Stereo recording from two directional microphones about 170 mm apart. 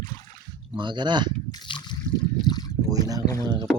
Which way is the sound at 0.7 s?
30° right (ahead or behind).